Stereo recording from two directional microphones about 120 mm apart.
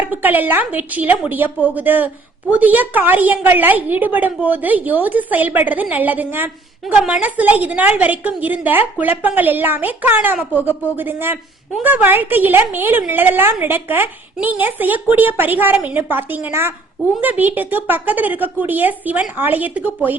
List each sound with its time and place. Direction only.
0.0 s a woman's voice: 15° right (ahead or behind)